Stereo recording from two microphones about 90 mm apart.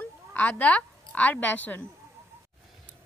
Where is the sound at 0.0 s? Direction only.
15° left (ahead or behind).